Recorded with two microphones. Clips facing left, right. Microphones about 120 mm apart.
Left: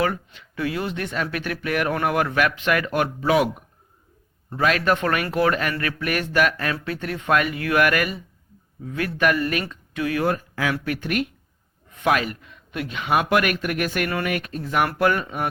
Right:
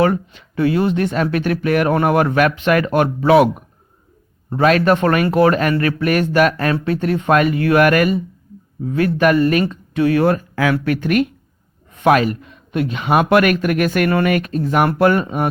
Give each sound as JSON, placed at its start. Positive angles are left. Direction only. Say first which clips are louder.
{"t": 0.0, "sound": "speech", "louder": "right 8 dB", "side_deg": -30}
{"t": 3.2, "sound": "speech", "louder": "right 9 dB", "side_deg": -65}
{"t": 4.4, "sound": "speech", "louder": "right 7 dB", "side_deg": -40}
{"t": 6.7, "sound": "speech", "louder": "right 10 dB", "side_deg": -30}
{"t": 10.2, "sound": "speech", "louder": "right 7 dB", "side_deg": -80}
{"t": 11.9, "sound": "speech", "louder": "right 8 dB", "side_deg": -40}
{"t": 13.3, "sound": "speech", "louder": "right 7 dB", "side_deg": -60}
{"t": 14.5, "sound": "speech", "louder": "right 7 dB", "side_deg": -40}